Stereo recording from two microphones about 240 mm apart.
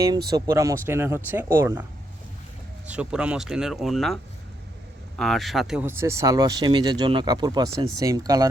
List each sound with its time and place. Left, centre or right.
0.3 s speech: centre